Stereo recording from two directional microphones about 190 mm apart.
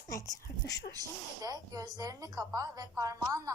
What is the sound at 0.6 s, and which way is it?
Speech, 60° left (ahead or behind).